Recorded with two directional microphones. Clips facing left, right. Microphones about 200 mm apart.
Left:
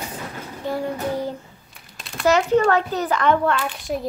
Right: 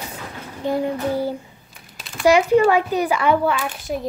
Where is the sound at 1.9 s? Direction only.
Centre (ahead or behind).